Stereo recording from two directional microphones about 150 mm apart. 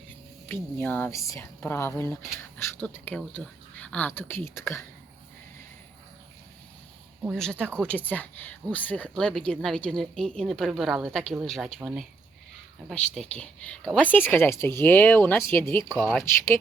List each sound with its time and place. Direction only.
0.4 s speech: 10° left (ahead or behind)
7.3 s speech: 5° left (ahead or behind)
13.1 s speech: 5° left (ahead or behind)
15.9 s speech: 5° right (ahead or behind)
16.2 s speech: 15° left (ahead or behind)